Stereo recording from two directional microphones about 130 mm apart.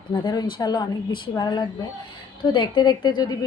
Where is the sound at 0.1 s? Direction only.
35° left (ahead or behind).